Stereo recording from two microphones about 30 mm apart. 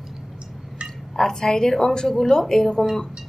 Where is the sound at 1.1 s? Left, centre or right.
Centre.